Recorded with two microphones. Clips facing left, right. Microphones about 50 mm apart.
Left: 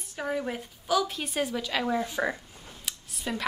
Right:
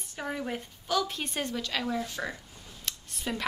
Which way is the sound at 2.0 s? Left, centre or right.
Left.